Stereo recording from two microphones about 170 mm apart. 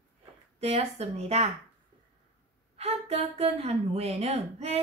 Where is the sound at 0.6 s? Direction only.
40° right (ahead or behind).